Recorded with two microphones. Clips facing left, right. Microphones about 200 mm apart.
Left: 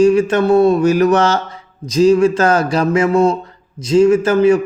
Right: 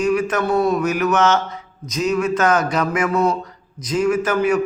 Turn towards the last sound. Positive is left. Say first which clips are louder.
# left 7 dB
turn(degrees=30)  # may be behind; listen again after turning